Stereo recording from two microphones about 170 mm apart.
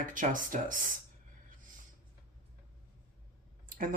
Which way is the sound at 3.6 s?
55° right (ahead or behind).